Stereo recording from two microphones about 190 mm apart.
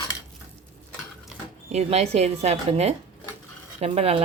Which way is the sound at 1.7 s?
35° right (ahead or behind).